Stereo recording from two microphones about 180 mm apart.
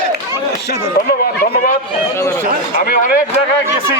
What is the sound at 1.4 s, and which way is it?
Speech, 50° left (ahead or behind).